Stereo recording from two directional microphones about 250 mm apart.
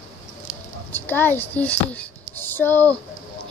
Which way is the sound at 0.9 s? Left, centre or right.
Centre.